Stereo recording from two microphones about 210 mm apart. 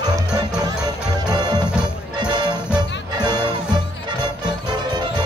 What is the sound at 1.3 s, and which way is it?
Music, 20° right (ahead or behind).